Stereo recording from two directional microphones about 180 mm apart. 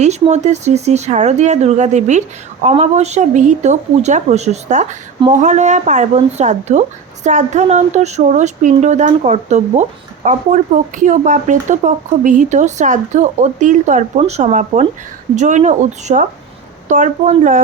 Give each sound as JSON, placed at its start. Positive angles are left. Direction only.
{"t": 0.0, "sound": "speech", "side_deg": -40}